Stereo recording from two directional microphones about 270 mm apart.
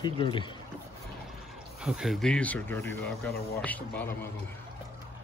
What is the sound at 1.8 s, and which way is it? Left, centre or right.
Speech, centre.